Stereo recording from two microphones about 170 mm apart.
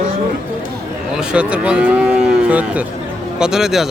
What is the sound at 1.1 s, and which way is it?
Cattle, 5° right (ahead or behind).